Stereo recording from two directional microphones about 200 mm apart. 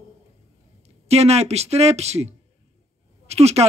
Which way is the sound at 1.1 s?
30° right (ahead or behind).